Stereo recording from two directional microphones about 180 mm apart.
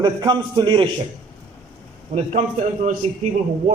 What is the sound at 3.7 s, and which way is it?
Speech, 50° right (ahead or behind).